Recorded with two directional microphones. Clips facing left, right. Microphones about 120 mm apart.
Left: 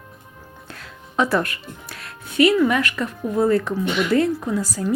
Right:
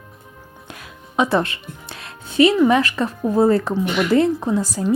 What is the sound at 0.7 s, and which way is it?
Speech, 15° right (ahead or behind).